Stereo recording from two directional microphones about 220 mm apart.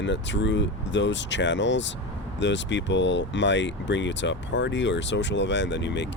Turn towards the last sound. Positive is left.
turn(degrees=55)  # may be behind; listen again after turning